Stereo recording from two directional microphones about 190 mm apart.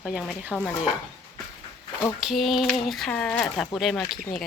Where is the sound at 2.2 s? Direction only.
Centre (ahead or behind).